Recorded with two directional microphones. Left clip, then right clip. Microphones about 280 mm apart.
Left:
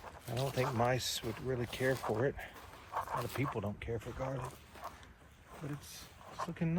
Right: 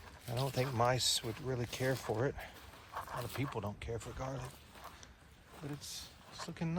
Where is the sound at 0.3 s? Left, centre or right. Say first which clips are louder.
Left 1 dB; right.